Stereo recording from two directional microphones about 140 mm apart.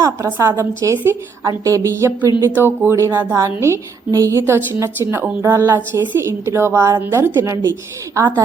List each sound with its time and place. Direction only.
0.0 s a woman's voice: 20° right (ahead or behind)